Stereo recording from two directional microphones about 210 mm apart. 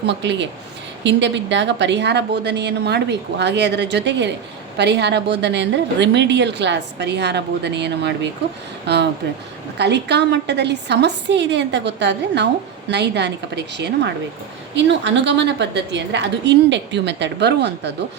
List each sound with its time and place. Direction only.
0.0 s a woman's voice: 55° right (ahead or behind)